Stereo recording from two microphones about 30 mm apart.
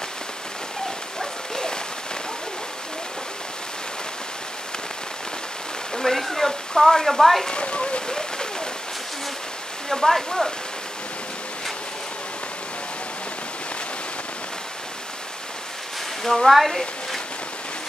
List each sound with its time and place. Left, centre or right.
1.5 s a sound: left
6.1 s speech: centre
7.5 s speech: left
8.1 s a sound: left
9.8 s speech: centre
16.3 s speech: centre